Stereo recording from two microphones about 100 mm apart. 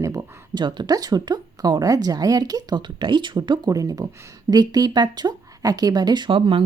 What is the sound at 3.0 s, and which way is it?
Speech, 55° right (ahead or behind).